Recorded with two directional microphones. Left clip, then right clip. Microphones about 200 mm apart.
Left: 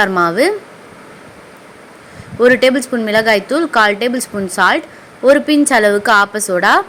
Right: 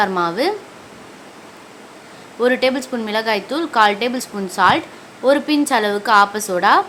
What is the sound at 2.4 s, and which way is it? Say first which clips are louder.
A woman's voice: left 6 dB; 20° left (ahead or behind).